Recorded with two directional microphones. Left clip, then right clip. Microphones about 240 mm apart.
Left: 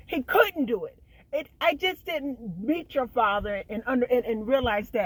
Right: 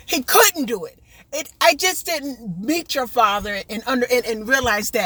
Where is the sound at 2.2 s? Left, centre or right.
Right.